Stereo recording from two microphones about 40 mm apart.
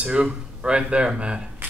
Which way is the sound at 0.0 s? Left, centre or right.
Right.